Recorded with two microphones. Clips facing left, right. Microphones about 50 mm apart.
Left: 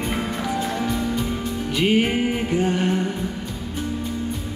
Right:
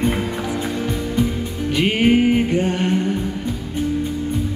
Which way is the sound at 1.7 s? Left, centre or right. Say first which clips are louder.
Right 4 dB; right.